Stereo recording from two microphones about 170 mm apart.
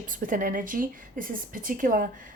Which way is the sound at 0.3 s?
50° right (ahead or behind).